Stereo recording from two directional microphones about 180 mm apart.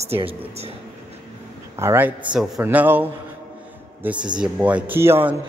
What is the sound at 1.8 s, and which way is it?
Speech, 15° right (ahead or behind).